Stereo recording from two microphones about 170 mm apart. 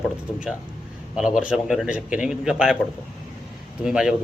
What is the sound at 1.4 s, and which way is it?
Speech, 5° right (ahead or behind).